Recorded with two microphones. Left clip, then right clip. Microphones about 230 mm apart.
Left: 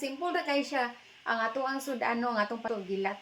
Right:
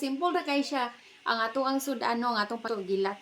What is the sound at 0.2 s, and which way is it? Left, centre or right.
Speech, centre.